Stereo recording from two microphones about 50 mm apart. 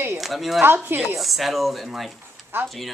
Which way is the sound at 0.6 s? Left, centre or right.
Right.